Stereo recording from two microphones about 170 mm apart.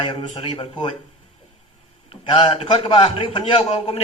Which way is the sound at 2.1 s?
35° left (ahead or behind).